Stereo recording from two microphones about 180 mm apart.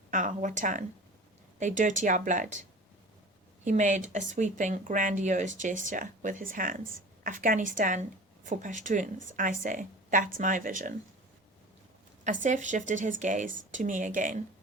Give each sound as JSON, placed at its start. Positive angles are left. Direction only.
{"t": 0.1, "sound": "speech", "side_deg": -45}
{"t": 12.2, "sound": "speech", "side_deg": -45}